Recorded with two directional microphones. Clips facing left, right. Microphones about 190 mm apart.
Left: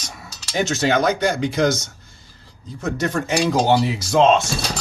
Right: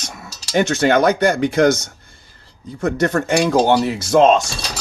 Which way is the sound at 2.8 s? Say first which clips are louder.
Right 5 dB; 50° right (ahead or behind).